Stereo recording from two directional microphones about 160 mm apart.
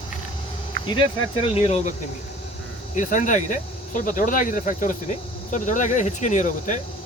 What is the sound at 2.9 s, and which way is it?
Speech, 50° left (ahead or behind).